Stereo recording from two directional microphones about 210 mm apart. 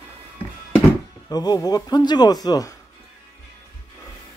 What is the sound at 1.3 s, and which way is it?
A man's voice, 20° left (ahead or behind).